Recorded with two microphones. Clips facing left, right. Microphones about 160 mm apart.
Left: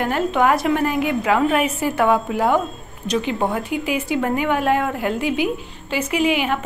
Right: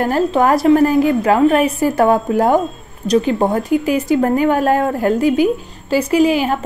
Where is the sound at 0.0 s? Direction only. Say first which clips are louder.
Right 4 dB; 35° right (ahead or behind).